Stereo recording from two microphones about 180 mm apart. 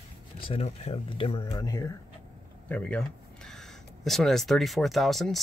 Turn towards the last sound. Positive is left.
turn(degrees=0)  # may be behind; listen again after turning